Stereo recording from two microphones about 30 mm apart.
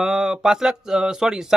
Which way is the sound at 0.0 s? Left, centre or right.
Right.